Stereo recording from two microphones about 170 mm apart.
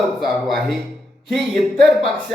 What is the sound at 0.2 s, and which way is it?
Speech, centre (ahead or behind).